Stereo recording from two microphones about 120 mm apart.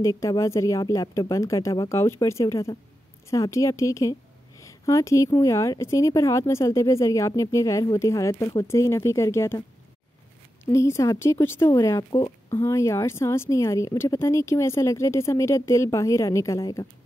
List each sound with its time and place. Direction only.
0.0 s speech: 30° left (ahead or behind)
10.7 s speech: 25° left (ahead or behind)
12.4 s speech: 25° left (ahead or behind)